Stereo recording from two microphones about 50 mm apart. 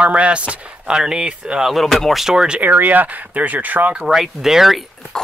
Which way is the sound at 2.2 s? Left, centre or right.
Centre.